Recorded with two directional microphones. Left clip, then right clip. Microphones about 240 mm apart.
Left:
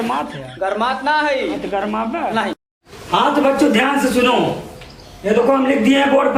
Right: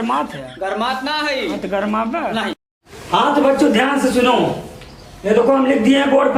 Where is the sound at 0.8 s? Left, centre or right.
Centre.